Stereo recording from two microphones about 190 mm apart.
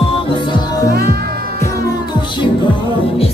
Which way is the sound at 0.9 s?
55° right (ahead or behind).